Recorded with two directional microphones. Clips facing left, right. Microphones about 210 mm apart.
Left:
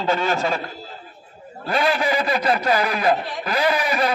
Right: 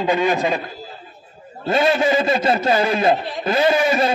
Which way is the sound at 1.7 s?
25° right (ahead or behind).